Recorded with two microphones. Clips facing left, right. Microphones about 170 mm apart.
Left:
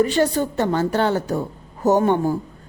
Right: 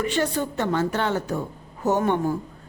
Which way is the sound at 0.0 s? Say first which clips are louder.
Left 6 dB; 35° left (ahead or behind).